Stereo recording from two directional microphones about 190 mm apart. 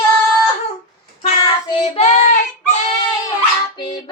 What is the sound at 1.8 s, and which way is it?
Child singing, 35° left (ahead or behind).